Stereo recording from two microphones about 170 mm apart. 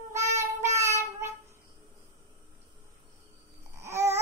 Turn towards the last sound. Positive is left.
turn(degrees=-15)  # may be behind; listen again after turning